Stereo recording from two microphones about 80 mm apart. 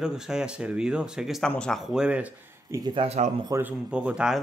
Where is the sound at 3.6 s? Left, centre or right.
Centre.